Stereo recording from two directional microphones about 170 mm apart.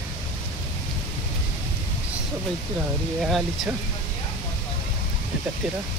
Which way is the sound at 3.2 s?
Centre (ahead or behind).